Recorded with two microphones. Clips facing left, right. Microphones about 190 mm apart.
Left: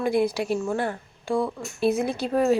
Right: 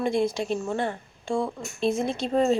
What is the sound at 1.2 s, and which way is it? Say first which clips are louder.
A woman's voice: left 2 dB; centre (ahead or behind).